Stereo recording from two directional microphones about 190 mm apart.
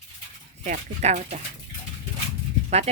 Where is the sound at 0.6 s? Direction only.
40° right (ahead or behind).